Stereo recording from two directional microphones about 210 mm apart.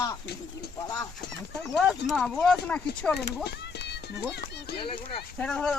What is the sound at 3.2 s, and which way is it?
Music, 55° left (ahead or behind).